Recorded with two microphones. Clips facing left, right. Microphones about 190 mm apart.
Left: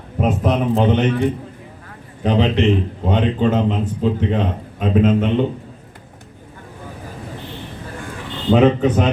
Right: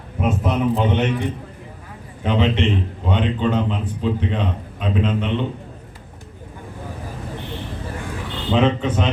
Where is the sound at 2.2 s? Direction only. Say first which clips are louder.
Left 3 dB; 40° left (ahead or behind).